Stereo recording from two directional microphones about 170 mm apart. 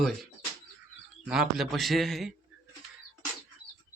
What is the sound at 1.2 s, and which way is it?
A man's voice, 5° right (ahead or behind).